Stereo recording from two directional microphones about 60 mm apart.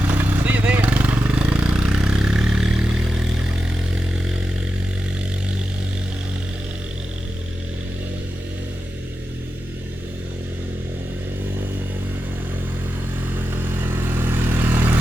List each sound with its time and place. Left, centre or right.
0.1 s vehicle: right; by 3.2 s centre
13.7 s vehicle: right